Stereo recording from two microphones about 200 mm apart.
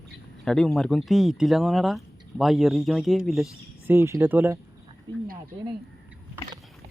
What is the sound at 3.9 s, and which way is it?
Speech, 15° right (ahead or behind).